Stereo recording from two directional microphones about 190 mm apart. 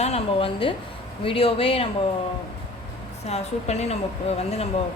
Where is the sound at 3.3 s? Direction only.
35° left (ahead or behind).